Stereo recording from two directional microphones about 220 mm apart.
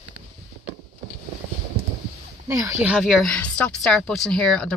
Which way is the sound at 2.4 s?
15° right (ahead or behind).